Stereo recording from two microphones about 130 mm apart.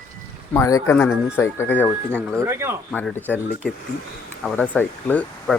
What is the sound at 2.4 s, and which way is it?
Speech, 20° right (ahead or behind).